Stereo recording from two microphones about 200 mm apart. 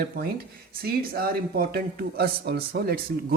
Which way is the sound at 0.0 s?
50° right (ahead or behind).